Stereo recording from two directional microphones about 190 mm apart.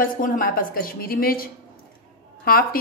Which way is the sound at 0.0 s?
50° left (ahead or behind).